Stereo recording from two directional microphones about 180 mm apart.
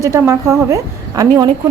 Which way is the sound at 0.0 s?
15° right (ahead or behind).